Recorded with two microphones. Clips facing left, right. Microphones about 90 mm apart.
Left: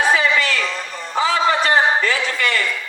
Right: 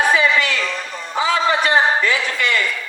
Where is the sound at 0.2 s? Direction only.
20° right (ahead or behind).